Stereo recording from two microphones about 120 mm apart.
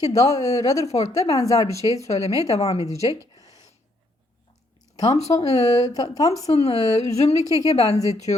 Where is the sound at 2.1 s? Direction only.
60° left (ahead or behind).